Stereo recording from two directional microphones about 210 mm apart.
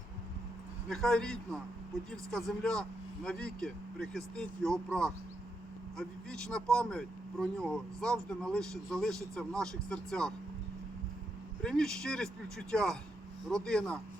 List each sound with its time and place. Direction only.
0.9 s speech: centre (ahead or behind)
11.6 s speech: 5° left (ahead or behind)